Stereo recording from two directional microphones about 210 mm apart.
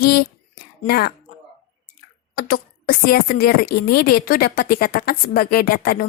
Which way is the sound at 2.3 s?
45° left (ahead or behind).